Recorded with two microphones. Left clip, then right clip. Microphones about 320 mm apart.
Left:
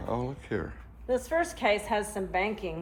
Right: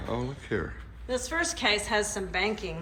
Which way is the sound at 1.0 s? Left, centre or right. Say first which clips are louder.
Left 2 dB; left.